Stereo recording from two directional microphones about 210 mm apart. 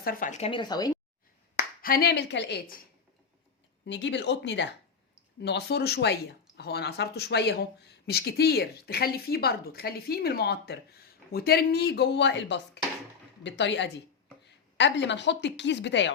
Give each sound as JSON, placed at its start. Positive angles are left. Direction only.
{"t": 0.0, "sound": "a woman's voice", "side_deg": 40}
{"t": 1.5, "sound": "speech", "side_deg": 45}
{"t": 3.8, "sound": "speech", "side_deg": 55}